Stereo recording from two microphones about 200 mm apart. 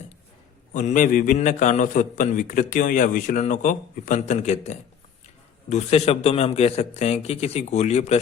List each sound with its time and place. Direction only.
0.7 s a man's voice: 40° left (ahead or behind)